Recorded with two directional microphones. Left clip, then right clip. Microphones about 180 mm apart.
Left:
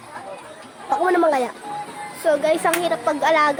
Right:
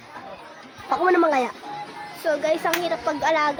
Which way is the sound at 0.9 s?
25° right (ahead or behind).